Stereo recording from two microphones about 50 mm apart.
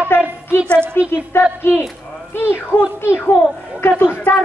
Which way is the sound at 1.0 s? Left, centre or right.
Left.